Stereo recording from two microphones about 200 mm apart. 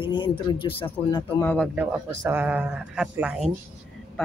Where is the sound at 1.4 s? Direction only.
10° left (ahead or behind).